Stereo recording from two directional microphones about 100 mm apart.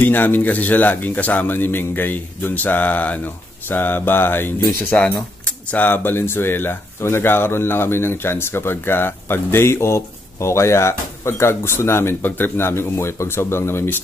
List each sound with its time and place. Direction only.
0.0 s speech: 20° left (ahead or behind)